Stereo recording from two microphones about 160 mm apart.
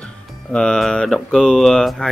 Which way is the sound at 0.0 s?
5° left (ahead or behind).